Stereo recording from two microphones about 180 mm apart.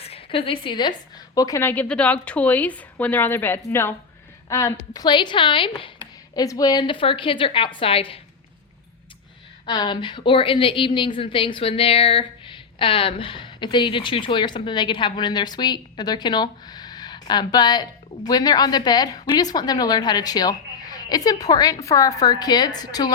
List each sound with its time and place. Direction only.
0.0 s a woman's voice: 30° left (ahead or behind)
9.6 s a woman's voice: 20° left (ahead or behind)